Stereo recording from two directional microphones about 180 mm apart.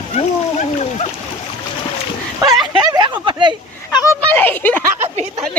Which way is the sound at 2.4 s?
25° right (ahead or behind).